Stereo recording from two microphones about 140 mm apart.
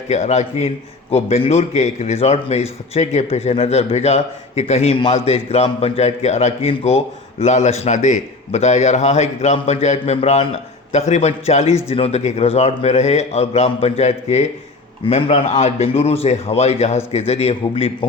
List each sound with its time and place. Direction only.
0.1 s a man's voice: 55° left (ahead or behind)